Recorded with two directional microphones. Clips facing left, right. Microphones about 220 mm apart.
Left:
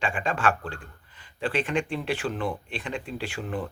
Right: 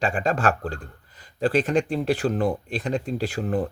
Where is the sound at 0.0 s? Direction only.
40° right (ahead or behind).